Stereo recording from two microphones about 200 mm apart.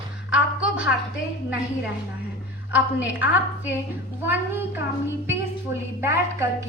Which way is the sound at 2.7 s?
10° right (ahead or behind).